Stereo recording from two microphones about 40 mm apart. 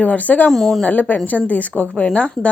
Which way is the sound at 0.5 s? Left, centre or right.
Centre.